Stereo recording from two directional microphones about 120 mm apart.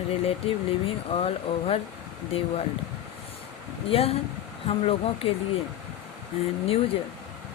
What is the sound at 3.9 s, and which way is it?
Speech, 55° left (ahead or behind).